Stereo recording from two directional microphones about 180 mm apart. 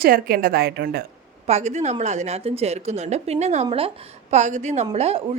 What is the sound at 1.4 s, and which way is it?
Speech, 40° right (ahead or behind).